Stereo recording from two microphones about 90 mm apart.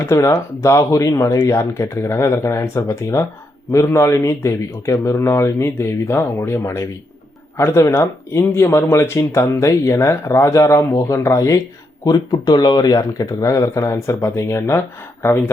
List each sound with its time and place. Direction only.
0.0 s speech: 35° left (ahead or behind)
12.0 s speech: 45° left (ahead or behind); by 15.4 s 30° left (ahead or behind)